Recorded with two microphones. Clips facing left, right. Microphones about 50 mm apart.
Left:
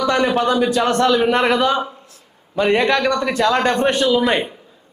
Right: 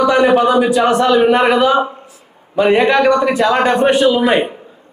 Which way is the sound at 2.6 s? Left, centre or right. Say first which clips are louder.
Right 5 dB; centre.